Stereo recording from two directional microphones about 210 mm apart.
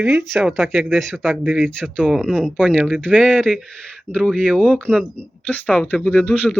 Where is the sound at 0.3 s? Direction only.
Centre (ahead or behind).